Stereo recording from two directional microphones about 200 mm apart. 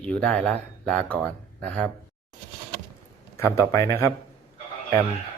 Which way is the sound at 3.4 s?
15° left (ahead or behind).